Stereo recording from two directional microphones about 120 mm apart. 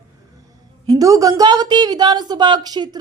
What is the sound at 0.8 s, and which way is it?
A woman's voice, 30° right (ahead or behind).